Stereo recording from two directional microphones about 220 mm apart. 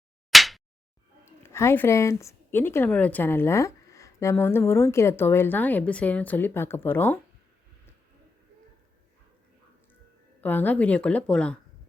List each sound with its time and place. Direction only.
0.3 s a sound: centre (ahead or behind)
1.2 s a woman's voice: 10° left (ahead or behind)
10.4 s a woman's voice: 10° left (ahead or behind)